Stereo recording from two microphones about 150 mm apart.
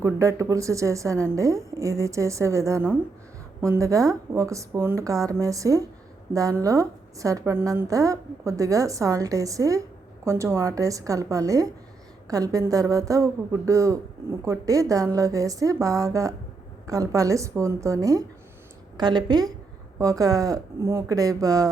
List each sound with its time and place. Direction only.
0.0 s a woman's voice: 20° right (ahead or behind)